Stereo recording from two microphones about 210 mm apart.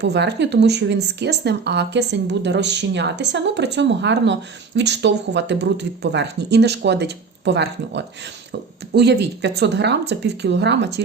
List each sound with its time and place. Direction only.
0.0 s speech: 55° right (ahead or behind)